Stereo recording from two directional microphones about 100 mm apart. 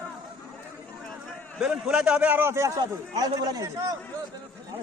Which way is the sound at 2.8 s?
40° right (ahead or behind).